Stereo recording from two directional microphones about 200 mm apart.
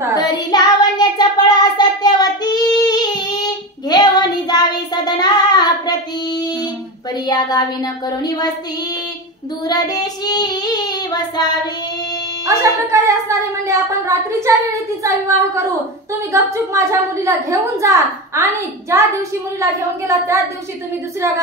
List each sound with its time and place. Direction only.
0.1 s child singing: 20° left (ahead or behind)
9.7 s child singing: 20° left (ahead or behind)
12.4 s a woman's voice: 15° right (ahead or behind)
16.1 s a woman's voice: 15° right (ahead or behind)